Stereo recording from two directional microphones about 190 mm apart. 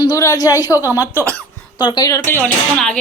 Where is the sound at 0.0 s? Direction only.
20° left (ahead or behind).